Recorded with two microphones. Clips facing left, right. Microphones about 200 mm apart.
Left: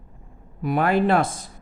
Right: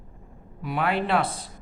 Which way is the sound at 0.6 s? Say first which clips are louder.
Left 6 dB; 45° left (ahead or behind).